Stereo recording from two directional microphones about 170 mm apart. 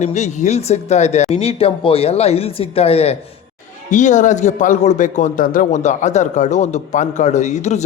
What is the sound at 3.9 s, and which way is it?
Speech, 45° left (ahead or behind).